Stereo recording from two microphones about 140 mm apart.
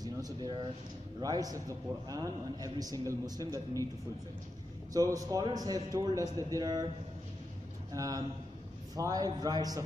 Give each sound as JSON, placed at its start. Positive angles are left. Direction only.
{"t": 0.0, "sound": "a man's voice", "side_deg": -30}
{"t": 4.9, "sound": "a man's voice", "side_deg": -25}
{"t": 7.9, "sound": "a man's voice", "side_deg": -25}